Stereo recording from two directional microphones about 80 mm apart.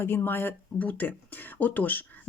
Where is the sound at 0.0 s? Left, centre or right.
Left.